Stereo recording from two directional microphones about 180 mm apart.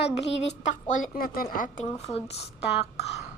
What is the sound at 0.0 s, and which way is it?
Speech, 70° left (ahead or behind).